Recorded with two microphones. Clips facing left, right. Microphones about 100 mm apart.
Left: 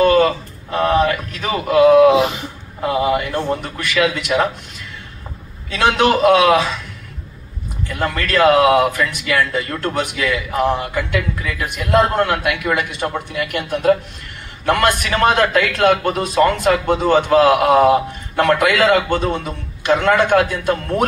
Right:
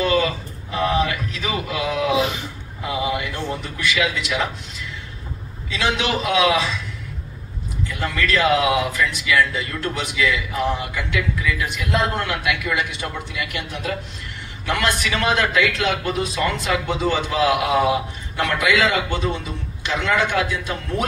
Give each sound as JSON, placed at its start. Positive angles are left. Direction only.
{"t": 0.0, "sound": "a sound", "side_deg": 50}
{"t": 2.8, "sound": "speech", "side_deg": 50}
{"t": 7.9, "sound": "speech", "side_deg": 50}